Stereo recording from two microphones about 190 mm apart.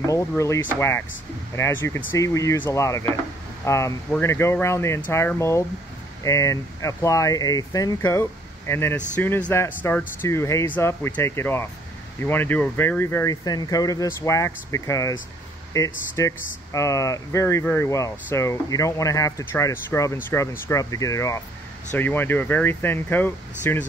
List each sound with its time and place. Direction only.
0.0 s speech: 15° left (ahead or behind)
2.0 s speech: 15° left (ahead or behind)
16.2 s speech: 15° left (ahead or behind)